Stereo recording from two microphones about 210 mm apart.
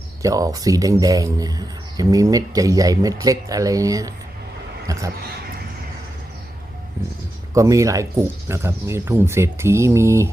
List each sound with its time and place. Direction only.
0.2 s speech: 15° right (ahead or behind)
7.0 s speech: 15° right (ahead or behind)